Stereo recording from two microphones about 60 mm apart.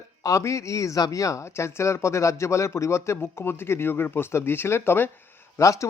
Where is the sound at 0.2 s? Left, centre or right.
Left.